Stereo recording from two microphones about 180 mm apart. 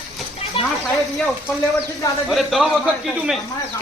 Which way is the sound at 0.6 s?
30° left (ahead or behind).